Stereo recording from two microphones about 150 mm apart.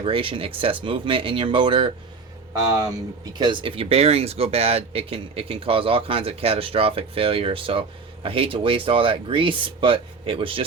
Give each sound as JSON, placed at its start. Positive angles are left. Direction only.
{"t": 0.0, "sound": "speech", "side_deg": -35}
{"t": 3.2, "sound": "speech", "side_deg": -30}